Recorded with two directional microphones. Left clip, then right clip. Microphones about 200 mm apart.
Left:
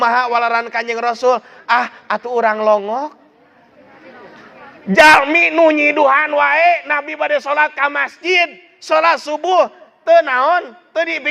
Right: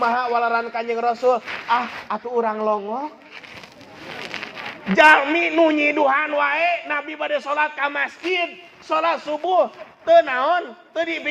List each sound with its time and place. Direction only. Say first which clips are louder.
0.0 s a man's voice: left 5 dB; 60° left (ahead or behind)
4.9 s a man's voice: left 5 dB; 50° left (ahead or behind)